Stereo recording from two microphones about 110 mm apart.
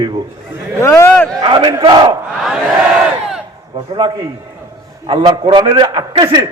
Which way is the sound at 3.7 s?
50° right (ahead or behind).